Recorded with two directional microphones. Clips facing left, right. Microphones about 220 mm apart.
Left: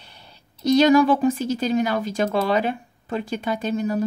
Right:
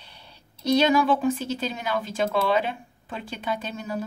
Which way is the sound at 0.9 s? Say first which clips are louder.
Left 5 dB; 40° left (ahead or behind).